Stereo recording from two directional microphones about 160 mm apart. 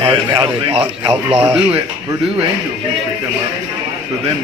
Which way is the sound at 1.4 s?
15° right (ahead or behind).